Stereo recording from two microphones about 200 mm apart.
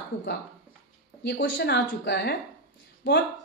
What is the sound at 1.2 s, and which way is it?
A woman's voice, 60° left (ahead or behind).